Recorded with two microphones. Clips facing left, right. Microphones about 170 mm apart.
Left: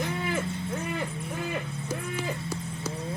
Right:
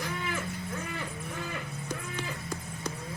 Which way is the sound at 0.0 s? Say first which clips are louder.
Left 5 dB; 25° left (ahead or behind).